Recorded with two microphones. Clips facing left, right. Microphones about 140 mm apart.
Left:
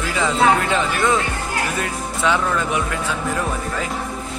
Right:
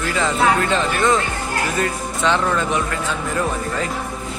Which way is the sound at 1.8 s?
5° left (ahead or behind).